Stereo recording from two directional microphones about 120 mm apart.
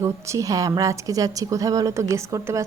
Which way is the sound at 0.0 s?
25° right (ahead or behind).